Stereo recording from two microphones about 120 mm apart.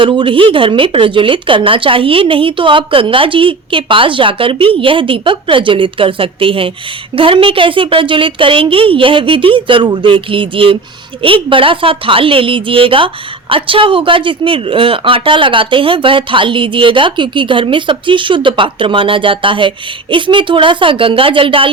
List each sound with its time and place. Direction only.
0.0 s speech: 45° right (ahead or behind)